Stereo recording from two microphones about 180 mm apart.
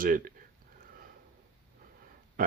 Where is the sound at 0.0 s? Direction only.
50° right (ahead or behind).